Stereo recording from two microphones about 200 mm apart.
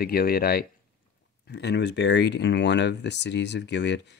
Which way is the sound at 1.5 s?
60° left (ahead or behind).